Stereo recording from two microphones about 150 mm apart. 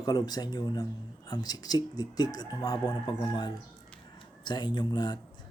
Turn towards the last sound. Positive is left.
turn(degrees=30)  # may be behind; listen again after turning